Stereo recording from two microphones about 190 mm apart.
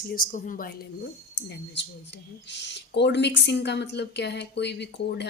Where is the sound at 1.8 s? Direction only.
65° left (ahead or behind).